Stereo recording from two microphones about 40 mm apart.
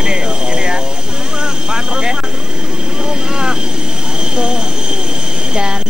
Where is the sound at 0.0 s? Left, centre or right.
Centre.